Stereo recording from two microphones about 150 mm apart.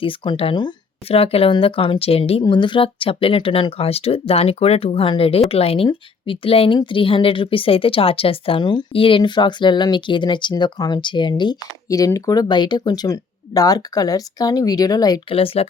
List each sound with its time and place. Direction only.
0.0 s a woman's voice: 35° left (ahead or behind)
15.4 s a woman's voice: 40° left (ahead or behind)